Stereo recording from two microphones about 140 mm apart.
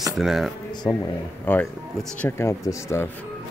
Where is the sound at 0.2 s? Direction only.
Centre (ahead or behind).